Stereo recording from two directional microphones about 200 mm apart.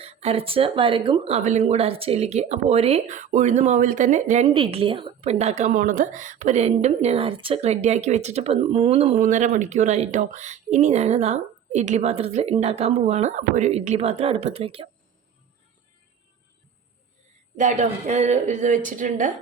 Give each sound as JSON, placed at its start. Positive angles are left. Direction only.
{"t": 0.0, "sound": "speech", "side_deg": -30}
{"t": 17.6, "sound": "speech", "side_deg": -40}